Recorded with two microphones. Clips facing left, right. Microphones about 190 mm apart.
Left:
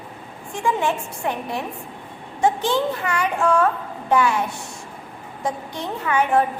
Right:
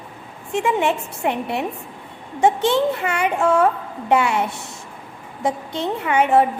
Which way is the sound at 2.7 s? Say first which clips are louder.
Right 2 dB; 25° right (ahead or behind).